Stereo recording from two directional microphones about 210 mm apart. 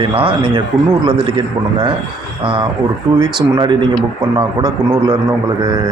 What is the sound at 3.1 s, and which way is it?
A man's voice, 20° right (ahead or behind).